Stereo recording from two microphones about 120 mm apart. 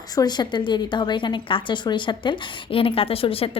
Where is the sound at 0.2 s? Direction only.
35° left (ahead or behind).